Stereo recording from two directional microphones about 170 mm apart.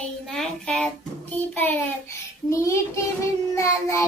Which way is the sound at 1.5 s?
15° left (ahead or behind).